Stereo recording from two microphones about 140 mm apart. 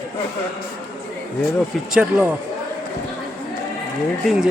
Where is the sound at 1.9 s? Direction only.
5° right (ahead or behind).